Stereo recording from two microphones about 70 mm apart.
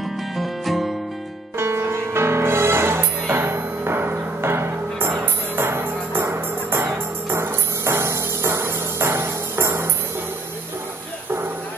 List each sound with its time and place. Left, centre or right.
0.4 s music: centre
1.6 s music: right